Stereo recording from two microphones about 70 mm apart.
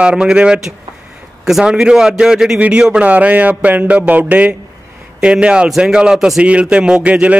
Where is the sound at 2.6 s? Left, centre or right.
Right.